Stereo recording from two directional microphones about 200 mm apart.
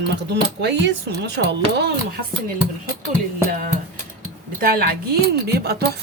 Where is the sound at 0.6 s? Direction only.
60° right (ahead or behind).